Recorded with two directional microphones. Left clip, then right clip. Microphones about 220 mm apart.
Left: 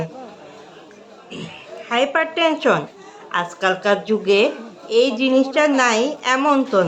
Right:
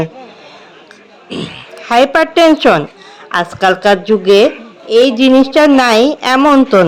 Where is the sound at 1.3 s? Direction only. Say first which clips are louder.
Right 10 dB; 40° right (ahead or behind).